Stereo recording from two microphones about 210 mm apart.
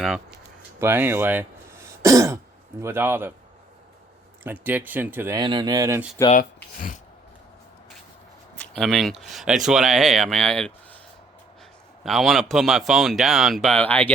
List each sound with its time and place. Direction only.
0.0 s speech: centre (ahead or behind)
4.4 s speech: 10° right (ahead or behind)
5.4 s speech: 20° right (ahead or behind)
6.3 s speech: 40° left (ahead or behind)
8.5 s speech: centre (ahead or behind)
12.0 s speech: centre (ahead or behind)